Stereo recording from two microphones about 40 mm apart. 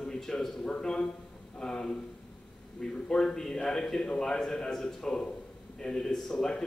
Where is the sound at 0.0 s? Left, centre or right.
Centre.